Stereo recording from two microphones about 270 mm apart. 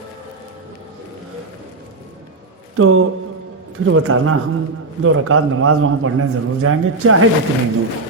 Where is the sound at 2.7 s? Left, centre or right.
Right.